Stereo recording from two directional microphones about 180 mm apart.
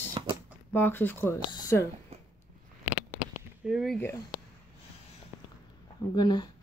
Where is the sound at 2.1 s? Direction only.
35° right (ahead or behind).